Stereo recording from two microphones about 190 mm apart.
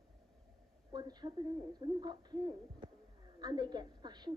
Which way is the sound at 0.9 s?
20° right (ahead or behind).